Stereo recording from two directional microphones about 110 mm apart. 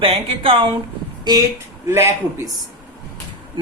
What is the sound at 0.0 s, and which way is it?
A woman's voice, 60° right (ahead or behind).